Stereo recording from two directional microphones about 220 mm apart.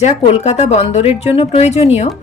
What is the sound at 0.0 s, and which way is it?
Speech, 30° left (ahead or behind).